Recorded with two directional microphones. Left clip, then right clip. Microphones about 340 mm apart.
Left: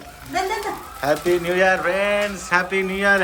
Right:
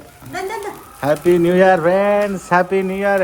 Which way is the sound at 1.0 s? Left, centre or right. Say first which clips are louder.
Right 5 dB; centre.